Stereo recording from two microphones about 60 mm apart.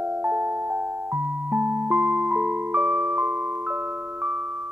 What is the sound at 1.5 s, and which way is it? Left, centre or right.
Music, right.